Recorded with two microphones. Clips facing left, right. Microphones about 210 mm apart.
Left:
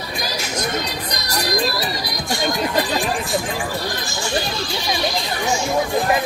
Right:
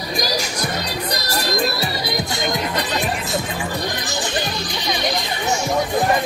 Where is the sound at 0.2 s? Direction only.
35° right (ahead or behind).